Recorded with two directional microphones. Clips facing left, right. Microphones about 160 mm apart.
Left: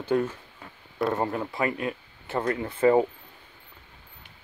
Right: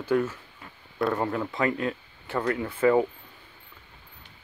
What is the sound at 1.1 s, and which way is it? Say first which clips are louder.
Speech: even; 20° left (ahead or behind).